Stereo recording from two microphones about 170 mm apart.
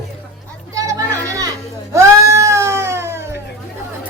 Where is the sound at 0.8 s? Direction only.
20° right (ahead or behind).